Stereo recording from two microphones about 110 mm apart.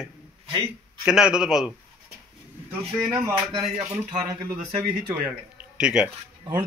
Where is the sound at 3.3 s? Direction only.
50° right (ahead or behind).